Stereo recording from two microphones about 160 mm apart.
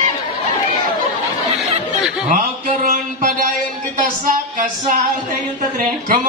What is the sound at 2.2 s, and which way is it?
Music, 55° right (ahead or behind).